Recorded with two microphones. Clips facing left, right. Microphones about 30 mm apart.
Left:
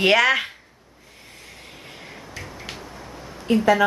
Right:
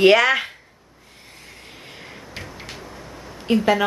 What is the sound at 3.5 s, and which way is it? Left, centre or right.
Speech, right.